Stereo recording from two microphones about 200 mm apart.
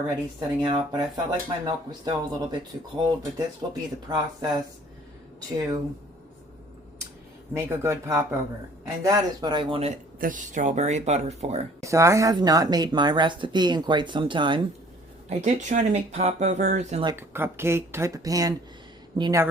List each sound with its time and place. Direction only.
0.3 s speech: 25° right (ahead or behind)
7.5 s speech: 15° right (ahead or behind)
10.2 s speech: 40° right (ahead or behind)
11.8 s speech: 15° right (ahead or behind)
15.3 s speech: 35° right (ahead or behind)
17.2 s speech: 10° right (ahead or behind)